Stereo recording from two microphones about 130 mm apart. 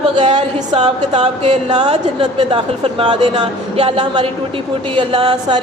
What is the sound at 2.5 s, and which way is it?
A woman's voice, 40° right (ahead or behind).